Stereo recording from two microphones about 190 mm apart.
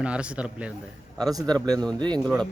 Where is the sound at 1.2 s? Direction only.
20° right (ahead or behind).